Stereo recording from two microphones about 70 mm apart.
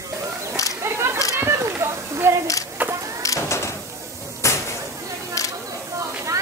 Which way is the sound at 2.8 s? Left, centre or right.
Right.